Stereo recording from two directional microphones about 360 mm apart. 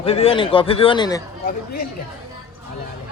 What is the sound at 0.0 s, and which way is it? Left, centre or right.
A man's voice, centre.